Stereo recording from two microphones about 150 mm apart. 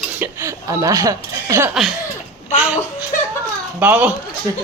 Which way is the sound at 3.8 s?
10° right (ahead or behind).